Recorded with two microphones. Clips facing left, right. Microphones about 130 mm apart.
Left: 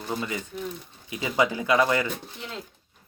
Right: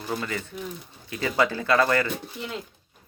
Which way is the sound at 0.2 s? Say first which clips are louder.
Even; 15° left (ahead or behind).